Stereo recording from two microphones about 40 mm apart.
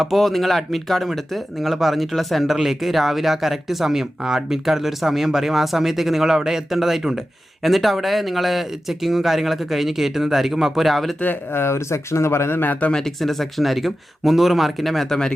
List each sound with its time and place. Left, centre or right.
0.2 s speech: centre
11.5 s speech: left
12.3 s speech: left
12.9 s speech: centre